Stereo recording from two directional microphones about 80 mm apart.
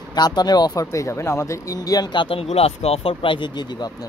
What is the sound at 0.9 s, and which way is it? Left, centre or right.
Speech, left.